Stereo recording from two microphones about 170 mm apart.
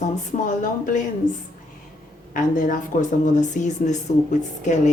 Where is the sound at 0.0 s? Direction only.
50° left (ahead or behind).